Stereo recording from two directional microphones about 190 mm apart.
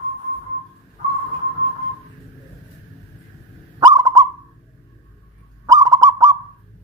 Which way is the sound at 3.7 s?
20° right (ahead or behind).